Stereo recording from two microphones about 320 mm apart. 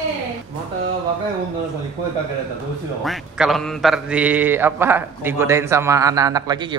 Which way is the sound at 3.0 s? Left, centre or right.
Centre.